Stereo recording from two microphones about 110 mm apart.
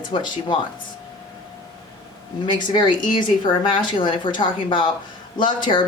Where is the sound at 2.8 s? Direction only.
45° left (ahead or behind).